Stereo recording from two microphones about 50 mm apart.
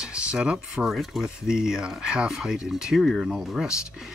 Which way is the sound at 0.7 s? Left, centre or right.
Centre.